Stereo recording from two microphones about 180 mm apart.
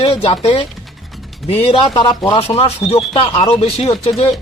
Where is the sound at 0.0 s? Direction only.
35° left (ahead or behind).